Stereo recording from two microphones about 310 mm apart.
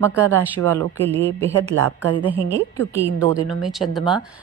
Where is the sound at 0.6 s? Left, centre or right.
Right.